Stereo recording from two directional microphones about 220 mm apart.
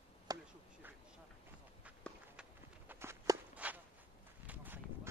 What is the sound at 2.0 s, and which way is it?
Walk, 5° right (ahead or behind).